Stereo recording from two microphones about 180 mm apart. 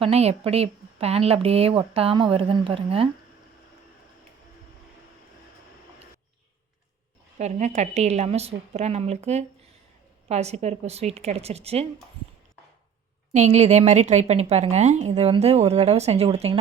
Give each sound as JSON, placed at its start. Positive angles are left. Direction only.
{"t": 0.0, "sound": "a woman's voice", "side_deg": -35}
{"t": 7.3, "sound": "a woman's voice", "side_deg": -40}
{"t": 13.3, "sound": "a woman's voice", "side_deg": -40}